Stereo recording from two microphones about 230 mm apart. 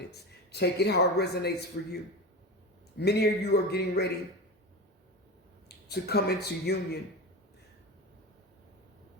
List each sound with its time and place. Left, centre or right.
0.0 s a man's voice: left
3.0 s a man's voice: left
5.6 s speech: left